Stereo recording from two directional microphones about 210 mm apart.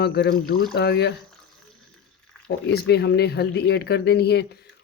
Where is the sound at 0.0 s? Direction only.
50° left (ahead or behind).